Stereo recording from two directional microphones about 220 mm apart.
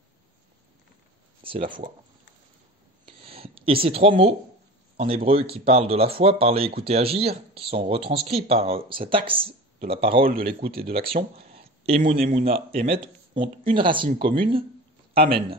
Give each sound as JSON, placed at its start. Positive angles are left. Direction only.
{"t": 1.4, "sound": "speech", "side_deg": -25}
{"t": 3.1, "sound": "a sound", "side_deg": -25}
{"t": 3.8, "sound": "speech", "side_deg": -25}
{"t": 10.2, "sound": "speech", "side_deg": -40}
{"t": 10.8, "sound": "speech", "side_deg": -25}
{"t": 11.5, "sound": "a sound", "side_deg": -25}
{"t": 12.0, "sound": "speech", "side_deg": -35}